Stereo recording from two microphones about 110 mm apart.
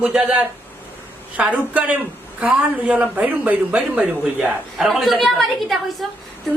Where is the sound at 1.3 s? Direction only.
10° right (ahead or behind).